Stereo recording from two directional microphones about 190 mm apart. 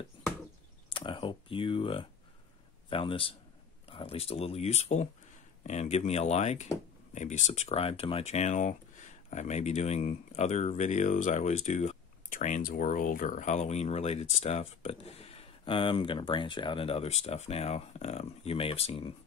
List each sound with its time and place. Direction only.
0.8 s computer keyboard: 25° left (ahead or behind)
2.9 s a man's voice: 25° left (ahead or behind)